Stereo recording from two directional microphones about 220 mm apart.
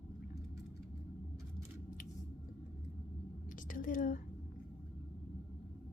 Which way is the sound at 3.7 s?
35° left (ahead or behind).